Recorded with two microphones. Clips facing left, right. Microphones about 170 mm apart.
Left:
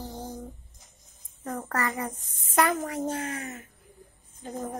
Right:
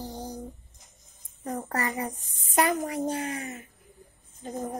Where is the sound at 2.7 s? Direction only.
15° right (ahead or behind).